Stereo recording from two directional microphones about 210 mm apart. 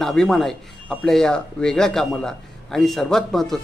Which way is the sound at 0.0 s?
Centre (ahead or behind).